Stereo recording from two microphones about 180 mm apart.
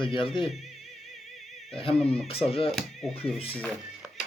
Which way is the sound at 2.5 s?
30° left (ahead or behind).